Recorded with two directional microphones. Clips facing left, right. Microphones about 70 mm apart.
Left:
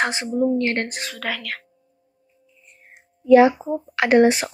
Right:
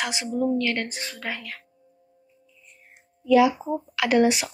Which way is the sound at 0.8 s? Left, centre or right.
Left.